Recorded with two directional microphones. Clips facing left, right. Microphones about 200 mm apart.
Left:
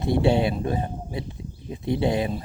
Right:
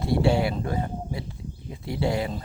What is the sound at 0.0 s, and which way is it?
Speech, 20° left (ahead or behind).